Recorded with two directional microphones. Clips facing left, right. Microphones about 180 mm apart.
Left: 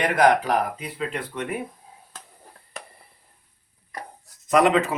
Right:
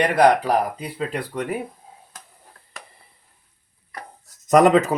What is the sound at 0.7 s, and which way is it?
Speech, 35° right (ahead or behind).